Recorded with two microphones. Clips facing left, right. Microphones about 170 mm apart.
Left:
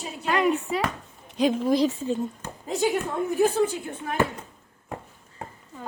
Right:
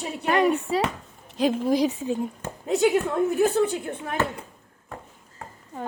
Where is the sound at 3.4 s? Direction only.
65° right (ahead or behind).